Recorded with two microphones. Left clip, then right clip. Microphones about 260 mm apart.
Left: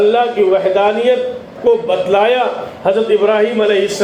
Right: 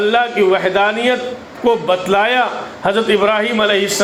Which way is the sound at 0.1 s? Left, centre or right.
Right.